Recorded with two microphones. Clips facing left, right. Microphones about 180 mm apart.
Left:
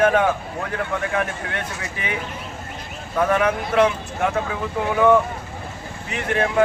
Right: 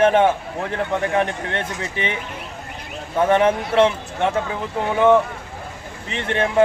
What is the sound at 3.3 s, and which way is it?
Speech, 25° right (ahead or behind).